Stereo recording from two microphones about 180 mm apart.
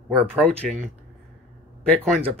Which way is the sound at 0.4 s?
5° left (ahead or behind).